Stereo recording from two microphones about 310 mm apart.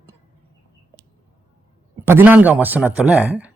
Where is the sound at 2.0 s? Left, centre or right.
Centre.